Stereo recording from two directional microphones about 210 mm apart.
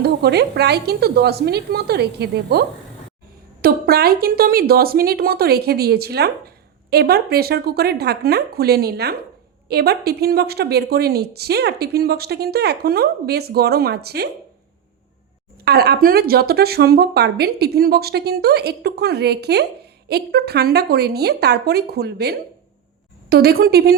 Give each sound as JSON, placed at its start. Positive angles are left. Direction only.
{"t": 0.0, "sound": "speech", "side_deg": -50}
{"t": 15.6, "sound": "speech", "side_deg": -50}